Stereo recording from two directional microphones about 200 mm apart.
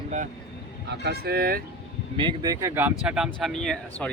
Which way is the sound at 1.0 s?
55° right (ahead or behind).